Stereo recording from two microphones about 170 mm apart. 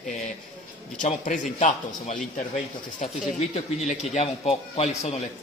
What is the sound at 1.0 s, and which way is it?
A man's voice, 50° left (ahead or behind).